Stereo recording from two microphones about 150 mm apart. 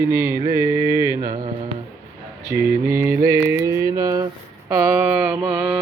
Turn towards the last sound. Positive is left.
turn(degrees=-10)  # may be behind; listen again after turning